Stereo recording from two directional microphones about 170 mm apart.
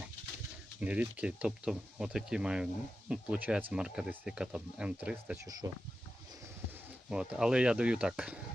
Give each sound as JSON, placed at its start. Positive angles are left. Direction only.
{"t": 0.8, "sound": "speech", "side_deg": -10}
{"t": 5.5, "sound": "speech", "side_deg": -20}
{"t": 7.1, "sound": "speech", "side_deg": -5}